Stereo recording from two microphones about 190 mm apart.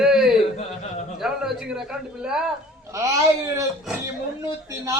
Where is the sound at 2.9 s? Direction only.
15° right (ahead or behind).